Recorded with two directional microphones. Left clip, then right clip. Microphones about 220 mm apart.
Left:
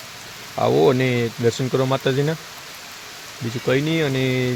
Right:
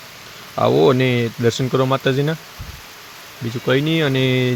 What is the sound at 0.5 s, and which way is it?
Speech, 15° right (ahead or behind).